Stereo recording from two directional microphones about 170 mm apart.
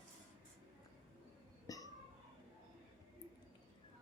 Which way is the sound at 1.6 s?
20° left (ahead or behind).